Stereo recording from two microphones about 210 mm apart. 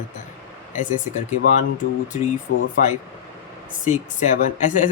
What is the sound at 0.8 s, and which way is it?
Speech, 35° left (ahead or behind).